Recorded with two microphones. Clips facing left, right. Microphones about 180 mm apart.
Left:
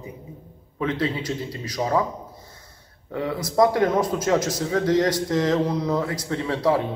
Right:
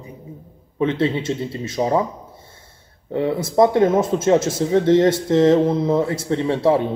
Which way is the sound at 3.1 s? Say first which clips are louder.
Right 4 dB; 25° right (ahead or behind).